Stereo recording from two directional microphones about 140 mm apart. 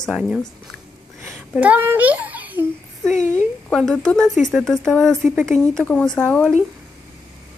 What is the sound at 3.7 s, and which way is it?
Speech, 5° left (ahead or behind).